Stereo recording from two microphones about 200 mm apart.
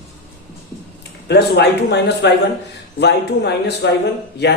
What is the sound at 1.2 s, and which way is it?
Speech, 55° left (ahead or behind).